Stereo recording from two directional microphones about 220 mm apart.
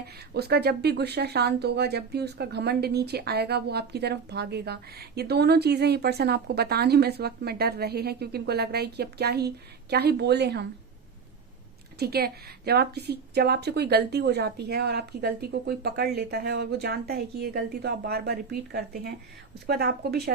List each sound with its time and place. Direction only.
0.0 s speech: 45° right (ahead or behind)
11.9 s speech: 45° right (ahead or behind)